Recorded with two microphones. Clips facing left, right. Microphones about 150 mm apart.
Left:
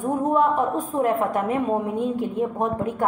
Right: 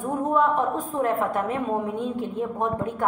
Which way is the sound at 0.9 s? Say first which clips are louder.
Left 2 dB; 10° left (ahead or behind).